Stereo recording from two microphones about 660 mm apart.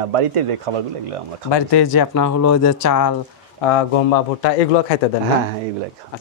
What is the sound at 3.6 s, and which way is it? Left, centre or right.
Speech, left.